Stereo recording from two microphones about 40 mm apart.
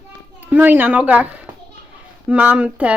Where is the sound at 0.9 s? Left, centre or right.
Right.